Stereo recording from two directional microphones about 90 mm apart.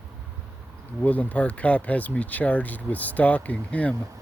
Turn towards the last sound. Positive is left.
turn(degrees=15)  # may be behind; listen again after turning